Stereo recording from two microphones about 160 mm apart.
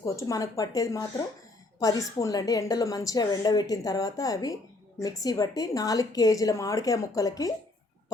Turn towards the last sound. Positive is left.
turn(degrees=20)  # may be behind; listen again after turning